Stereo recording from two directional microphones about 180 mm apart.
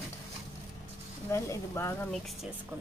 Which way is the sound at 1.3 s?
15° left (ahead or behind).